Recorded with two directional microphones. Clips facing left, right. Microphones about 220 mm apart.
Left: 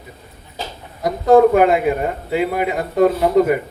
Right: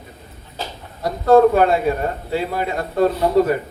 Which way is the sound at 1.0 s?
15° left (ahead or behind).